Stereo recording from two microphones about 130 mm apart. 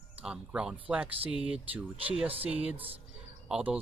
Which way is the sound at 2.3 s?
50° right (ahead or behind).